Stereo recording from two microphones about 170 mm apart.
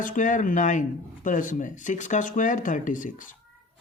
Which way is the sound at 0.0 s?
50° left (ahead or behind).